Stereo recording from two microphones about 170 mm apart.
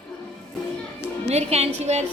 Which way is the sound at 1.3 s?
40° right (ahead or behind).